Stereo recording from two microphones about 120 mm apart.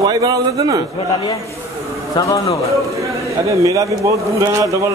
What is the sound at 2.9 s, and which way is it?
A man's voice, 25° right (ahead or behind).